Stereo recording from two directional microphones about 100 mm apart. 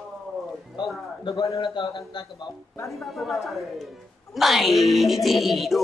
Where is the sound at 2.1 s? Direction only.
45° left (ahead or behind).